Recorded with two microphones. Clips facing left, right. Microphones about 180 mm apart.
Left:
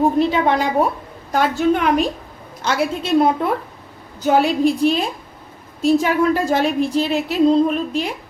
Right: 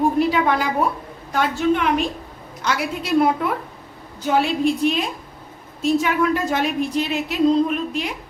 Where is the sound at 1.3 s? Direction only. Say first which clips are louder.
Left 3 dB; 40° left (ahead or behind).